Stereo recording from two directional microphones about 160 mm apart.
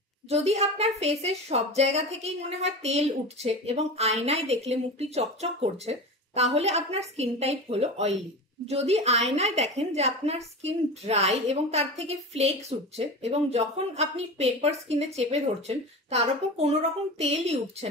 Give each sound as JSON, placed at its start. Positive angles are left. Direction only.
{"t": 0.3, "sound": "a woman's voice", "side_deg": -45}